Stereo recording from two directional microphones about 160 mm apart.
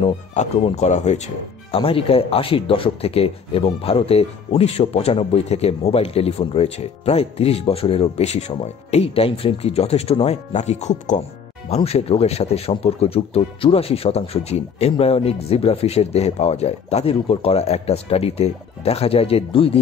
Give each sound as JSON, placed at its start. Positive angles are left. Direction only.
{"t": 0.3, "sound": "speech", "side_deg": 45}